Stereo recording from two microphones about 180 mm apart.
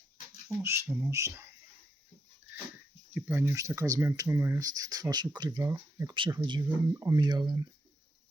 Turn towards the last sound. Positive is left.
turn(degrees=-25)  # may be behind; listen again after turning